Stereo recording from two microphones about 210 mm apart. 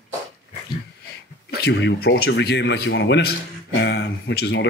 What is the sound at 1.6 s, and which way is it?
Speech, 50° left (ahead or behind).